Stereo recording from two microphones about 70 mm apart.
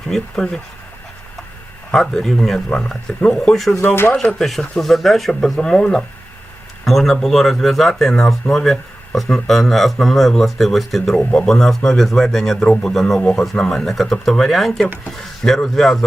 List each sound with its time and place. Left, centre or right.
0.1 s speech: centre
1.9 s speech: centre
3.5 s speech: centre
3.8 s speech: left
4.2 s speech: centre